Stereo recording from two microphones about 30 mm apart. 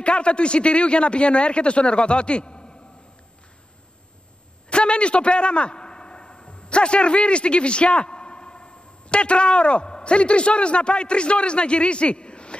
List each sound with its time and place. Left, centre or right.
0.0 s speech: left
4.6 s a man's voice: left